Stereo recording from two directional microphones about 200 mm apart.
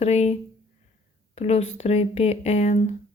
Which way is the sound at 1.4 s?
30° left (ahead or behind).